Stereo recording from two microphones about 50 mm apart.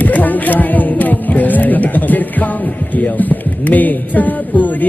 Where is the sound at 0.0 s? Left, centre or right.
Left.